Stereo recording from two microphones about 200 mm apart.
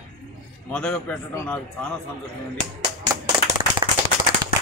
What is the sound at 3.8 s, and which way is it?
Clapping, 20° right (ahead or behind).